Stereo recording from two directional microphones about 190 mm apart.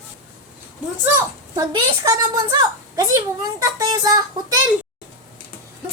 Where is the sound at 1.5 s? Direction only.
20° right (ahead or behind).